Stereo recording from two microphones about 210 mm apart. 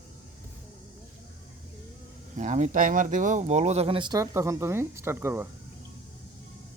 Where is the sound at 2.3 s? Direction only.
35° right (ahead or behind); by 5.5 s 10° right (ahead or behind).